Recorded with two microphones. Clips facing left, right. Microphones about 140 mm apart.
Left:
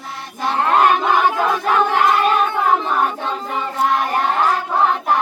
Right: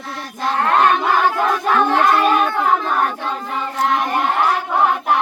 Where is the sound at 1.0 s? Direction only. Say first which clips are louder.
Even; 15° left (ahead or behind).